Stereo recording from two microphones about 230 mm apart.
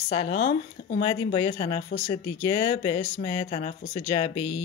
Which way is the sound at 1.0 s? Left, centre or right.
Left.